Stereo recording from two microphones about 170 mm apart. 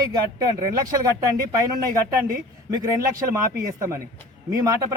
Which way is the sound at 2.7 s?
20° right (ahead or behind).